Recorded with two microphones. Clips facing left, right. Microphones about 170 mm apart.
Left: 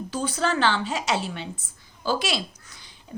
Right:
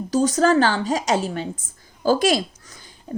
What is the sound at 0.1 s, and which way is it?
Speech, 40° right (ahead or behind).